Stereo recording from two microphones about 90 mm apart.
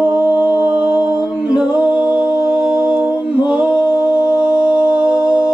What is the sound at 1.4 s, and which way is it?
A capella, 10° right (ahead or behind).